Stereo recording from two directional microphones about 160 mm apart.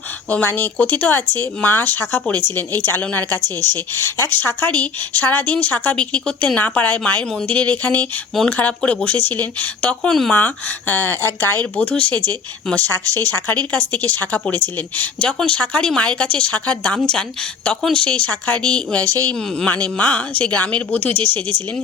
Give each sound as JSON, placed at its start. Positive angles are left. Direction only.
{"t": 0.3, "sound": "speech", "side_deg": 10}
{"t": 21.1, "sound": "speech", "side_deg": -30}